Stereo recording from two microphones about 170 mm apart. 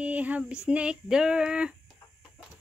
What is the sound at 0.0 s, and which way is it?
Female singing, 10° right (ahead or behind).